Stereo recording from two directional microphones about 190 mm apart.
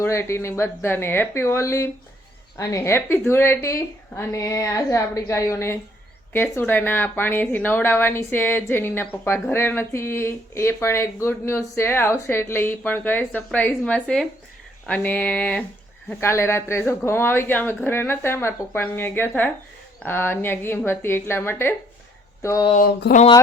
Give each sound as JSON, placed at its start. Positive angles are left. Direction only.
{"t": 0.0, "sound": "a woman's voice", "side_deg": 15}
{"t": 23.1, "sound": "speech", "side_deg": 60}